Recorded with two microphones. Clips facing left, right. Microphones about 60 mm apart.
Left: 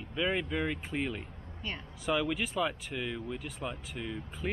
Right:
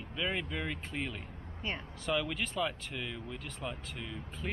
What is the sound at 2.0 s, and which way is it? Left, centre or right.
Speech, centre.